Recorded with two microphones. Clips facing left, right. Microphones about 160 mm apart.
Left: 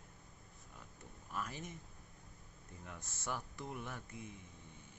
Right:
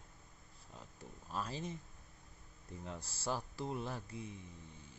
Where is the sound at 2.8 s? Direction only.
35° right (ahead or behind).